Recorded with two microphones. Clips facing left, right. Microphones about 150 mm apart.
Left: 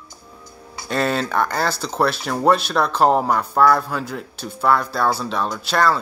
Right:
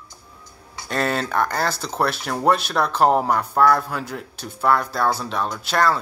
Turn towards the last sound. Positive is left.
turn(degrees=-15)  # may be behind; listen again after turning